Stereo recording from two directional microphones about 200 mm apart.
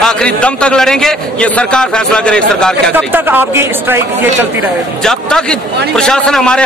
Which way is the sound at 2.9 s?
10° right (ahead or behind).